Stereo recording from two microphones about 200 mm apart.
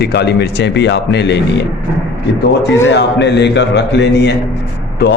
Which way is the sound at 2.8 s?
60° left (ahead or behind).